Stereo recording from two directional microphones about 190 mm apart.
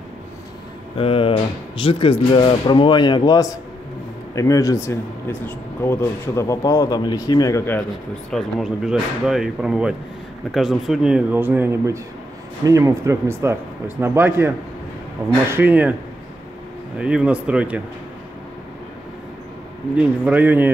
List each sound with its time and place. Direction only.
0.9 s speech: 30° left (ahead or behind); by 7.8 s 15° left (ahead or behind)
8.3 s speech: centre (ahead or behind)
15.5 s speech: 10° right (ahead or behind)
17.0 s speech: 5° right (ahead or behind)
20.0 s speech: 10° right (ahead or behind)